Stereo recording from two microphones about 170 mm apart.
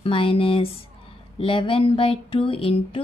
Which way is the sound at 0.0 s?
30° left (ahead or behind).